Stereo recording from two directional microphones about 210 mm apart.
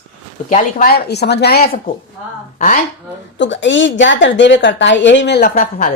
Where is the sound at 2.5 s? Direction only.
35° left (ahead or behind).